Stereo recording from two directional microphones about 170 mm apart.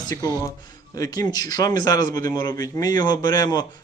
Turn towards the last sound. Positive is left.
turn(degrees=20)  # may be behind; listen again after turning